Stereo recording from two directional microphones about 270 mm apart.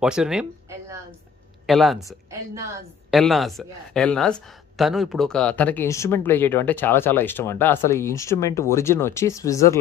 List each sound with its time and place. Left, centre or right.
0.0 s speech: centre
3.1 s speech: centre